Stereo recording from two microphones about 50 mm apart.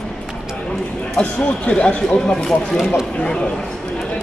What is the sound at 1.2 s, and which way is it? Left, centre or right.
Speech, left.